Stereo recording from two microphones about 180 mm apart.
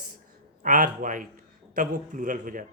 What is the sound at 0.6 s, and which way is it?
Speech, 45° right (ahead or behind).